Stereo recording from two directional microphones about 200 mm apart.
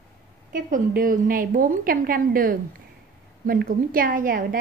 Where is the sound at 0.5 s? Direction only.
40° right (ahead or behind).